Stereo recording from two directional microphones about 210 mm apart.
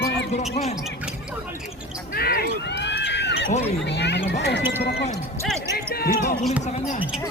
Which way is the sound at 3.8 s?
55° left (ahead or behind).